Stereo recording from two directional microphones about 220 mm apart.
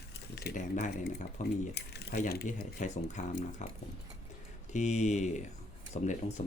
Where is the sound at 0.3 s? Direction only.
40° left (ahead or behind).